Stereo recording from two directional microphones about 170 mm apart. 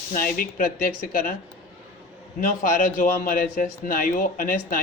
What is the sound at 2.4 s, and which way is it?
A man's voice, 60° left (ahead or behind).